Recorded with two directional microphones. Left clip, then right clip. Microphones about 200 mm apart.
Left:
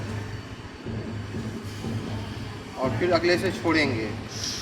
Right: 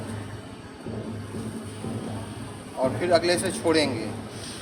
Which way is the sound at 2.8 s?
35° right (ahead or behind).